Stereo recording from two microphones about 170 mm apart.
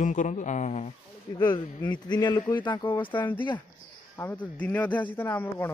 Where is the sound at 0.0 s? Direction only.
50° left (ahead or behind).